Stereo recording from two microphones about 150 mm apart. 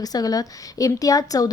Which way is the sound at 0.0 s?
25° left (ahead or behind).